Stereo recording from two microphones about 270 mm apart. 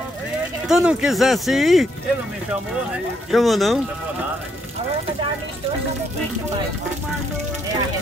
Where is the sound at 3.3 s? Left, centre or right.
Centre.